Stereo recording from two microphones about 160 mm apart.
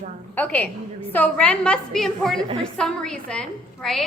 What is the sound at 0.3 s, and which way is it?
A woman's voice, 10° left (ahead or behind).